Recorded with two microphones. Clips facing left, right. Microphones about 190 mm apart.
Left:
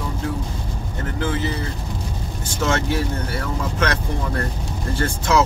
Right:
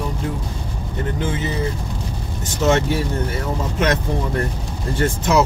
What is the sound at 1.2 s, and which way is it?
Speech, 20° right (ahead or behind).